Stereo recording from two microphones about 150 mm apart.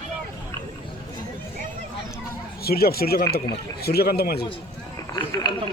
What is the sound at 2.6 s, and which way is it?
Speech, 90° left.